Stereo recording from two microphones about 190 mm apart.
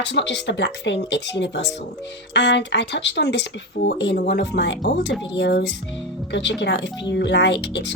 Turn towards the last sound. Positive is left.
turn(degrees=65)  # may be behind; listen again after turning